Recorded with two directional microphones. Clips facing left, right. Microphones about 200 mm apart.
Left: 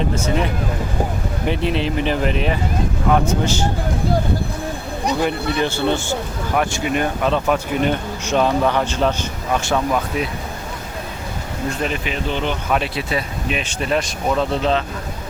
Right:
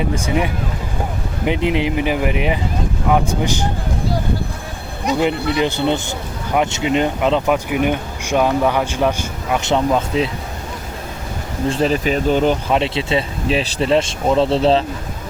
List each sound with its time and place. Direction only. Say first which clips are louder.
0.0 s speech: right 1 dB; 15° right (ahead or behind)
5.2 s speech: right 4 dB; 20° right (ahead or behind)
11.7 s speech: right 8 dB; 35° right (ahead or behind)
12.6 s speech: right 3 dB; 25° right (ahead or behind)